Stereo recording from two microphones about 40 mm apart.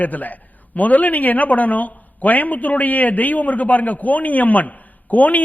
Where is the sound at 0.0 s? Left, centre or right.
Left.